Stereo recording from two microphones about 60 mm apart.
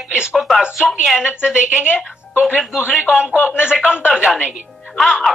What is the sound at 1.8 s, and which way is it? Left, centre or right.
Speech, left.